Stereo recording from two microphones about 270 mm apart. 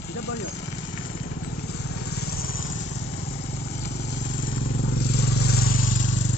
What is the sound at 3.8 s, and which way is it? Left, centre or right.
Vehicle, left.